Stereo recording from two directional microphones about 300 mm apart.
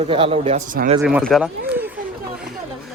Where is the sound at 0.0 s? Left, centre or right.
Centre.